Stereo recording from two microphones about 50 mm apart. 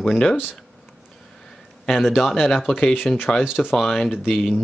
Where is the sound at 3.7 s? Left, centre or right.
Centre.